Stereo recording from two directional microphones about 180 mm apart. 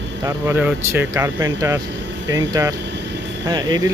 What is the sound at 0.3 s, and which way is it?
Speech, 10° right (ahead or behind).